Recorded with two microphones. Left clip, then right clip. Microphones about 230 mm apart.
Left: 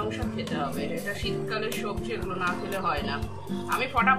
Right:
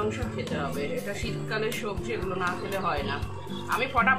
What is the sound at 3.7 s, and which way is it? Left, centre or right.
Speech, centre.